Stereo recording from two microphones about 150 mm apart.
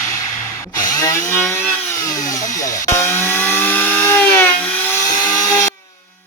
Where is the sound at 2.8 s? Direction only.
15° left (ahead or behind).